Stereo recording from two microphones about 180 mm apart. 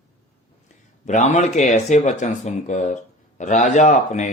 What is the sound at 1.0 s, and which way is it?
Speech, 40° left (ahead or behind).